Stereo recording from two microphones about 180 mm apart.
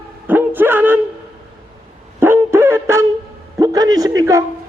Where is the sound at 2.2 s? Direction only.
15° right (ahead or behind).